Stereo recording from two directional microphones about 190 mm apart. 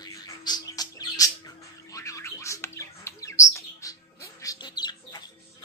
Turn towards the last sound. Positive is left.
turn(degrees=20)  # may be behind; listen again after turning